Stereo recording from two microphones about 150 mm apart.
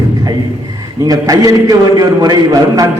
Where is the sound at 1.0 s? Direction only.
25° right (ahead or behind).